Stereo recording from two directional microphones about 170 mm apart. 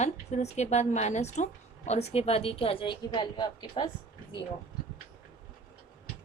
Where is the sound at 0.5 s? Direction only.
40° left (ahead or behind); by 3.8 s 25° left (ahead or behind).